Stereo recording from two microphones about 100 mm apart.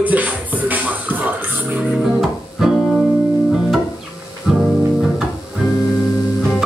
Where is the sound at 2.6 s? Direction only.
5° right (ahead or behind).